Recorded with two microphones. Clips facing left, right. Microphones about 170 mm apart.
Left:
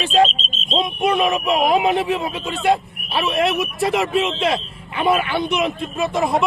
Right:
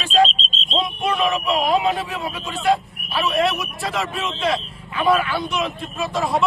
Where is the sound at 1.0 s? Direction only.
20° left (ahead or behind).